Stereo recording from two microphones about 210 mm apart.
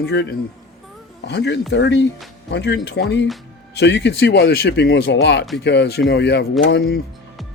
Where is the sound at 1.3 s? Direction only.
55° left (ahead or behind).